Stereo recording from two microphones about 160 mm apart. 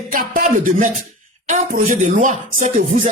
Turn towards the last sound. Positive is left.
turn(degrees=-50)  # may be behind; listen again after turning